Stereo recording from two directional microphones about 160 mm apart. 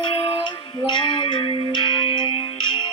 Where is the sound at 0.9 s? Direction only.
30° left (ahead or behind).